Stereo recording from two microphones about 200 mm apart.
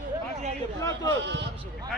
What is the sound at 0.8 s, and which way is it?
Speech, 20° left (ahead or behind).